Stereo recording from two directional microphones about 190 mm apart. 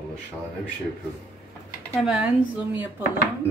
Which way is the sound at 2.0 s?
5° right (ahead or behind).